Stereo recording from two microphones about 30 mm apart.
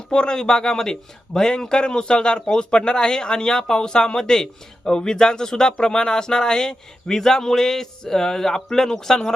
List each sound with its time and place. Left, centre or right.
0.1 s speech: left